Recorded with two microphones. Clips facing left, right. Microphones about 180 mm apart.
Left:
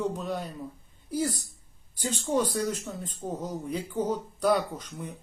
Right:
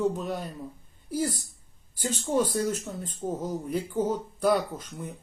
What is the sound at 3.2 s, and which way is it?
Speech, 5° right (ahead or behind).